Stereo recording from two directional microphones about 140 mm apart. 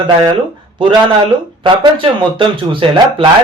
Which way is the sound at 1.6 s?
35° right (ahead or behind).